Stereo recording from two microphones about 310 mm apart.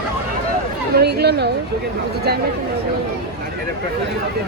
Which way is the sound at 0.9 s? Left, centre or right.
Right.